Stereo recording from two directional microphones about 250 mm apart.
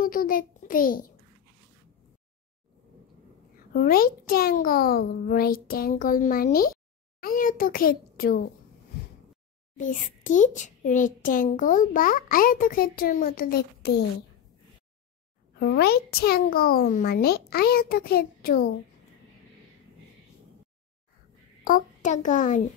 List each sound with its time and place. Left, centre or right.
0.0 s a child's voice: left
3.7 s a child's voice: left
9.8 s a child's voice: left
15.6 s a child's voice: left
21.6 s a child's voice: left